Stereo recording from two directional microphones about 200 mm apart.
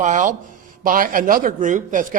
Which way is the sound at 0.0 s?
40° right (ahead or behind).